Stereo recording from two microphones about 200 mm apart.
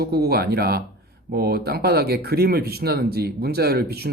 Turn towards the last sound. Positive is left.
turn(degrees=-50)  # may be behind; listen again after turning